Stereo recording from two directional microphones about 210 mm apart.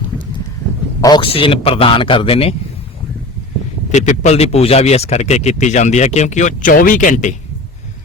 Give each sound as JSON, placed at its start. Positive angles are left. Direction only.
{"t": 1.0, "sound": "a man's voice", "side_deg": 20}
{"t": 3.9, "sound": "speech", "side_deg": 35}